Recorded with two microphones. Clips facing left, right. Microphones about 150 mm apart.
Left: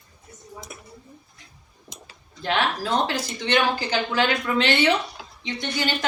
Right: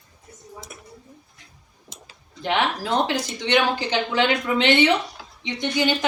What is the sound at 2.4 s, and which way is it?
A woman's voice, 15° right (ahead or behind).